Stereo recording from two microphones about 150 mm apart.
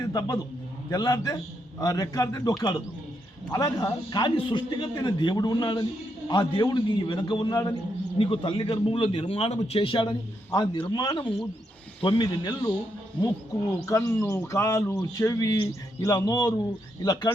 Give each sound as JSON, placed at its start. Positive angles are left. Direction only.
{"t": 0.0, "sound": "a man's voice", "side_deg": 25}
{"t": 13.8, "sound": "a man's voice", "side_deg": 20}